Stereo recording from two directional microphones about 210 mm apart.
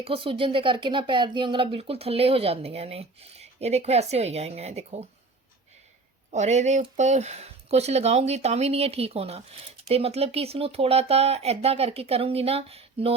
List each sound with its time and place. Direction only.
0.0 s speech: 25° right (ahead or behind)
6.3 s speech: 35° right (ahead or behind)